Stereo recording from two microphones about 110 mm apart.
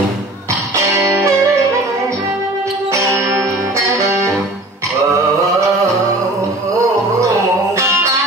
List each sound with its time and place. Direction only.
0.8 s music: 30° right (ahead or behind)
2.9 s music: 25° right (ahead or behind)